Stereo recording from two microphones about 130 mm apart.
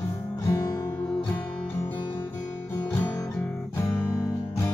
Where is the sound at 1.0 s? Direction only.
5° left (ahead or behind).